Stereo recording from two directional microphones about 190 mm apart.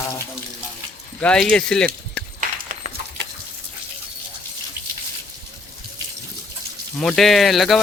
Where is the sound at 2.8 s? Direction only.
35° right (ahead or behind).